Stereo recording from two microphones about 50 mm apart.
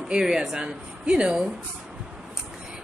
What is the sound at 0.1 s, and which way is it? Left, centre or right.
Speech, centre.